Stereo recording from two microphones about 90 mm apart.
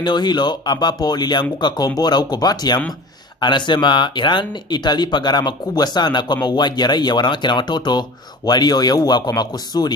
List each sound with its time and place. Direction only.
0.0 s speech: 55° left (ahead or behind)
3.3 s speech: 60° left (ahead or behind)